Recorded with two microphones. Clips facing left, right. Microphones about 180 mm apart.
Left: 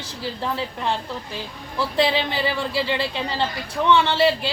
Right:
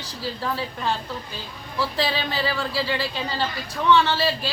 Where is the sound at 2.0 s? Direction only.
20° left (ahead or behind).